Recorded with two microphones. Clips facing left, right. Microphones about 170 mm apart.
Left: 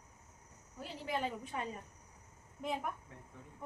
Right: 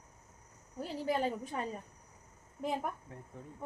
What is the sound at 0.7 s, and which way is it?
Speech, 40° right (ahead or behind).